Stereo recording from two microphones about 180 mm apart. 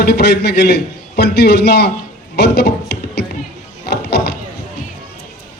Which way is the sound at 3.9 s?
65° left (ahead or behind).